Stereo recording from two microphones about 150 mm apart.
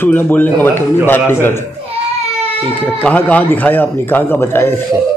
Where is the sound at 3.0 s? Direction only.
10° left (ahead or behind).